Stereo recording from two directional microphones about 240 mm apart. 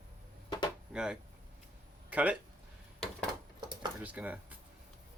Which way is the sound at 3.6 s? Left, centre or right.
Centre.